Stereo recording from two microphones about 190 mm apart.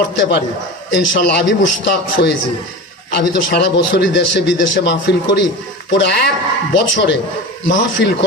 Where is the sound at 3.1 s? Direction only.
60° left (ahead or behind).